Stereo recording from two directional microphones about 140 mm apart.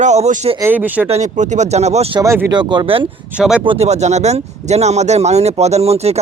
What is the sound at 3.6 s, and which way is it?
Speech, 50° right (ahead or behind).